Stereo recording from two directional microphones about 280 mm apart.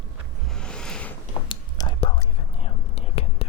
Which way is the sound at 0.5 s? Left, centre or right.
Centre.